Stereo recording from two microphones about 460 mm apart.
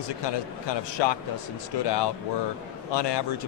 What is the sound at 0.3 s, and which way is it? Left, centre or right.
Speech, left.